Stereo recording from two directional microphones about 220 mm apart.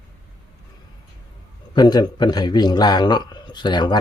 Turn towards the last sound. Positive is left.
turn(degrees=20)  # may be behind; listen again after turning